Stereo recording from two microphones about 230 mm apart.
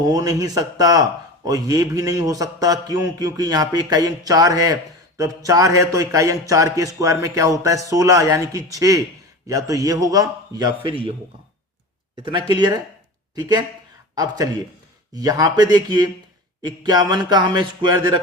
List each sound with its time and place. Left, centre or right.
0.0 s a man's voice: centre
12.1 s a man's voice: centre
15.1 s a man's voice: centre